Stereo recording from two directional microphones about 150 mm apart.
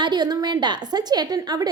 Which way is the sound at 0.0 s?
25° right (ahead or behind).